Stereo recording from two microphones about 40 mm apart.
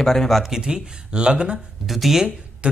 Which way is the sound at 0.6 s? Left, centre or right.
Right.